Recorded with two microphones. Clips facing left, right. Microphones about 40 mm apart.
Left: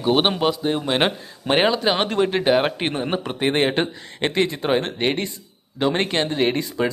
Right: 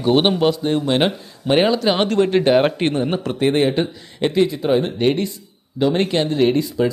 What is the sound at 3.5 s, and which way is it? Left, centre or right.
Speech, left.